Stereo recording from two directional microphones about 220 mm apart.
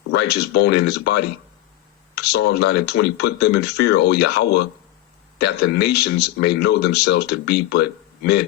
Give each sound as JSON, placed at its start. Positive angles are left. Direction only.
{"t": 0.1, "sound": "speech", "side_deg": 50}